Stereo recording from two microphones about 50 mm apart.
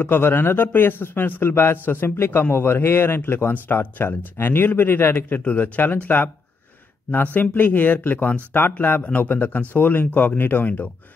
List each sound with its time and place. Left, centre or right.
0.0 s a man's voice: left
5.4 s speech: left
7.3 s speech: left